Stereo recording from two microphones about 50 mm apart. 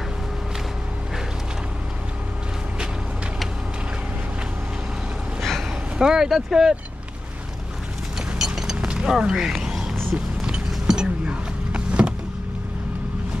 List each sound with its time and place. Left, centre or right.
5.9 s speech: centre
8.4 s a sound: centre
11.7 s vehicle: right